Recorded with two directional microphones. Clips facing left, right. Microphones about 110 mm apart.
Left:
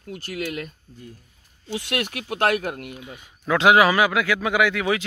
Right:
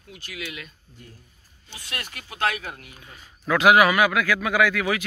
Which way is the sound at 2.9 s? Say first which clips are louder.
Left 8 dB; 15° left (ahead or behind).